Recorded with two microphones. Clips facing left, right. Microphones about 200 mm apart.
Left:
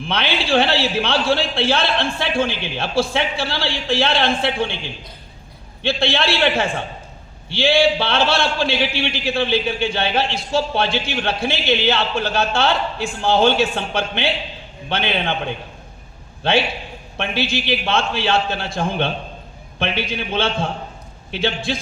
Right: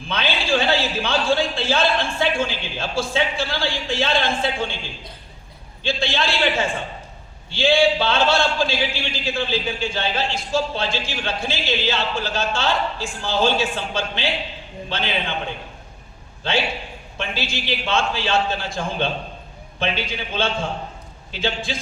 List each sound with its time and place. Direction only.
0.0 s a man's voice: 65° left (ahead or behind)
5.8 s a man's voice: 65° left (ahead or behind)
16.4 s a man's voice: 60° left (ahead or behind)